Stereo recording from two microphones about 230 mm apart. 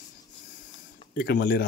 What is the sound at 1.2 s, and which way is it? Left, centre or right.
Speech, left.